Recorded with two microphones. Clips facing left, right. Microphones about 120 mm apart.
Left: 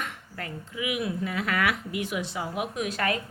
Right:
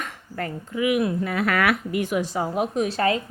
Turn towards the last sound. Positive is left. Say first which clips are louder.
# right 6 dB
turn(degrees=-30)  # may be behind; listen again after turning